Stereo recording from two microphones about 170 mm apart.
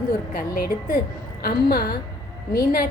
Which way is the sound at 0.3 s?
60° left (ahead or behind).